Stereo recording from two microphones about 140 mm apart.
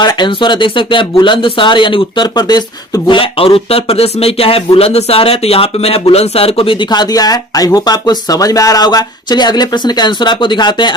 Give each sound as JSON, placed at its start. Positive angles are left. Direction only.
{"t": 0.0, "sound": "speech", "side_deg": 35}
{"t": 6.9, "sound": "speech", "side_deg": 30}